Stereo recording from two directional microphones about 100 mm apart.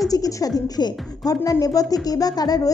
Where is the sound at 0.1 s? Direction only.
35° left (ahead or behind).